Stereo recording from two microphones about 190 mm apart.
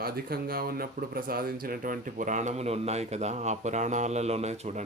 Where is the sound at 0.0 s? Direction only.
50° right (ahead or behind).